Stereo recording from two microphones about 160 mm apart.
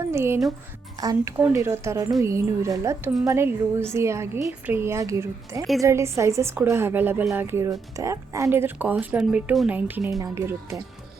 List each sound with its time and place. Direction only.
0.1 s speech: 15° right (ahead or behind)